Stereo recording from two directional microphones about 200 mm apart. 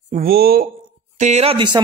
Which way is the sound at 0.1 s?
50° right (ahead or behind).